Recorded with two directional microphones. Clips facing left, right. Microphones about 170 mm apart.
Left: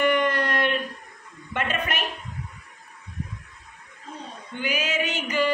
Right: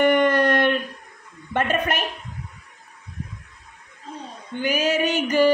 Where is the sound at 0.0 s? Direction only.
50° right (ahead or behind).